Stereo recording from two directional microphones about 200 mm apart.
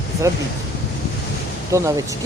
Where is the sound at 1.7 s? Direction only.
15° right (ahead or behind).